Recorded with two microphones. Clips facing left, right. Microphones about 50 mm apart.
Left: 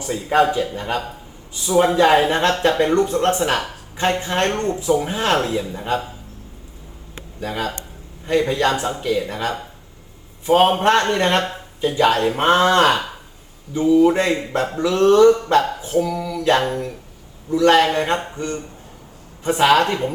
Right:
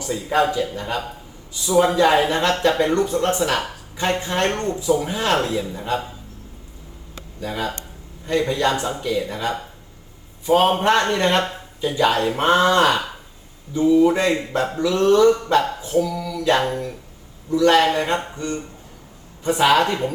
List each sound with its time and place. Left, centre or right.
0.0 s speech: left
7.2 s speech: left
11.4 s a sound: left
12.2 s speech: left